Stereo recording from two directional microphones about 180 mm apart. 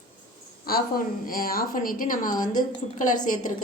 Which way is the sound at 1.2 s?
55° left (ahead or behind).